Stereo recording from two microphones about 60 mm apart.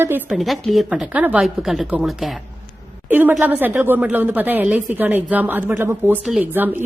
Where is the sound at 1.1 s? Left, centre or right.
Right.